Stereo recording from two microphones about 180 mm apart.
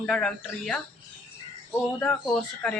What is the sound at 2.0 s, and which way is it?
Speech, 5° left (ahead or behind).